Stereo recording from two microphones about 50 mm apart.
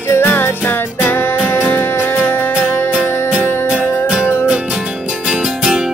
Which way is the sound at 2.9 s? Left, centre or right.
Centre.